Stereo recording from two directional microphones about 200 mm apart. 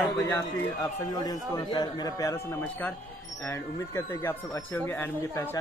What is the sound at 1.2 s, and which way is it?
Speech, 20° left (ahead or behind).